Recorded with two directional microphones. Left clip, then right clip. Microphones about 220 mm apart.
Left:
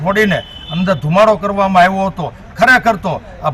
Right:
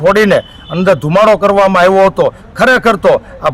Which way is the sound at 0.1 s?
25° right (ahead or behind).